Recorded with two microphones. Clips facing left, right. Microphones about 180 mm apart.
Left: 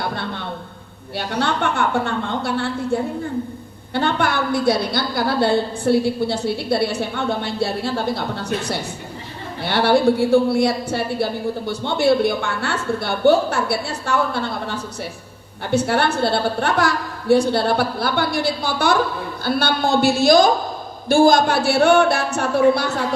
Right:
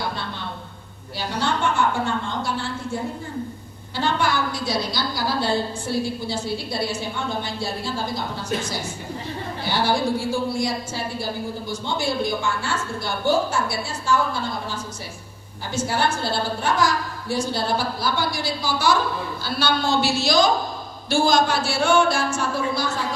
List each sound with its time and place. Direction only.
1.2 s a woman's voice: 60° left (ahead or behind)
9.6 s a woman's voice: 65° left (ahead or behind)